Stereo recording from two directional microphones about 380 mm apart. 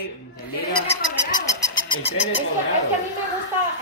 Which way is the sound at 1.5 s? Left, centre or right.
Centre.